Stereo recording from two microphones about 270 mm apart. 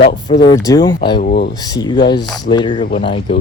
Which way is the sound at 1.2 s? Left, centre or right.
Left.